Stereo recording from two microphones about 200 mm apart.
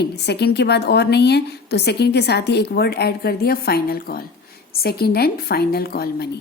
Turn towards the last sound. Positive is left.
turn(degrees=55)  # may be behind; listen again after turning